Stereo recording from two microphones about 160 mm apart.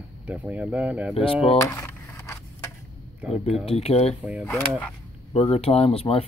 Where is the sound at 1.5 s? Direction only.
15° left (ahead or behind).